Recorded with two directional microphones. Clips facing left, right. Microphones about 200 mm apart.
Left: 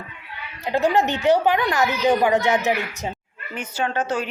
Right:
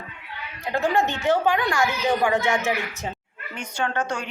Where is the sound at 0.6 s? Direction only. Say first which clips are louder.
Left 3 dB; 20° left (ahead or behind).